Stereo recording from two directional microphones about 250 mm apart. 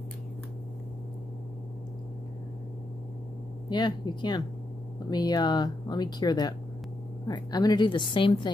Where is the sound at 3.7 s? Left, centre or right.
Centre.